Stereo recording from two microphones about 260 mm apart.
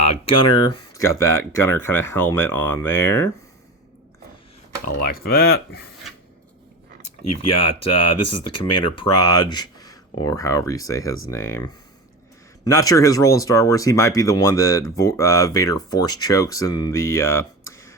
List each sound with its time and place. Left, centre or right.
0.0 s a sound: left
0.4 s speech: centre
5.0 s speech: left
7.0 s speech: left
9.1 s speech: centre
17.7 s burping: centre